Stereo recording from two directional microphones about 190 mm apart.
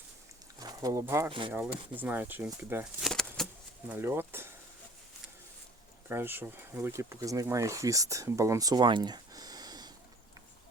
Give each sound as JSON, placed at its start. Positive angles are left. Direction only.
{"t": 0.6, "sound": "speech", "side_deg": -20}
{"t": 3.1, "sound": "a sound", "side_deg": 0}
{"t": 3.8, "sound": "speech", "side_deg": -10}
{"t": 6.1, "sound": "speech", "side_deg": -10}